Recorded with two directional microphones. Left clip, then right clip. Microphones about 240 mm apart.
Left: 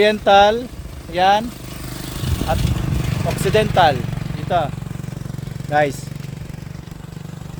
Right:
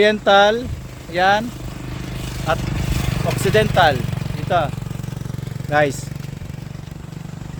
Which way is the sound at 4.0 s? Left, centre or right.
Right.